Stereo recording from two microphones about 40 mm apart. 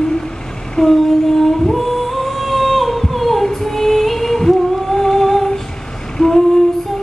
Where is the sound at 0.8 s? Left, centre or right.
Centre.